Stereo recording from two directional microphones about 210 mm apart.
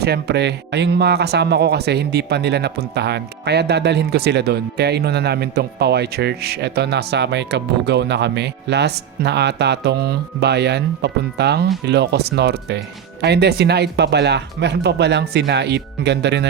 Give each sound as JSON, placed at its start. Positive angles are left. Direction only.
{"t": 0.0, "sound": "speech", "side_deg": -50}